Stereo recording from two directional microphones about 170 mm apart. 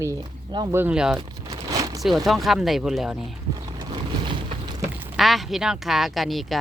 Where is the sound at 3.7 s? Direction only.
25° right (ahead or behind).